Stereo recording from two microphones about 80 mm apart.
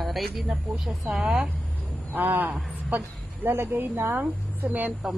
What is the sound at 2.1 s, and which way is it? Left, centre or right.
A man's voice, right.